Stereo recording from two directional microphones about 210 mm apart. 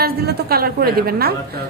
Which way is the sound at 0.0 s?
50° right (ahead or behind).